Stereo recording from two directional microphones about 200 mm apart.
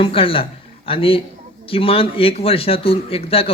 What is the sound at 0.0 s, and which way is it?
A man's voice, 25° left (ahead or behind).